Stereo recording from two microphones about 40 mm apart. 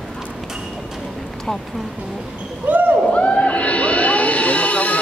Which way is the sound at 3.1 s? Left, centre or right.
Left.